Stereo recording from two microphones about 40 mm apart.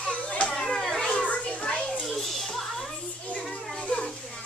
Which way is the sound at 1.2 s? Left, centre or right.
Left.